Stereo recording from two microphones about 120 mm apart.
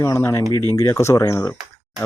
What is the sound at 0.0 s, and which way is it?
Speech, 25° left (ahead or behind).